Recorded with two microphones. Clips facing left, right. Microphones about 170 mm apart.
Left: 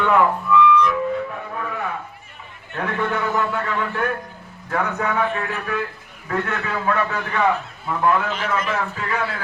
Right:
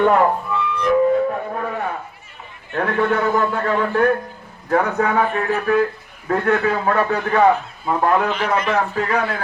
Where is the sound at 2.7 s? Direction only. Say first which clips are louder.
Right 5 dB; 45° right (ahead or behind).